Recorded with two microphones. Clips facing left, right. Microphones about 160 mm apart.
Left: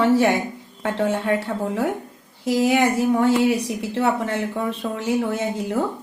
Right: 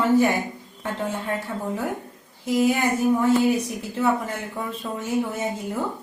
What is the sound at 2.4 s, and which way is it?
A woman's voice, 80° left.